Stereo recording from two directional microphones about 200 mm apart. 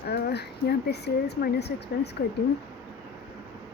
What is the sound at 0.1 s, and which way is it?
Speech, 55° left (ahead or behind).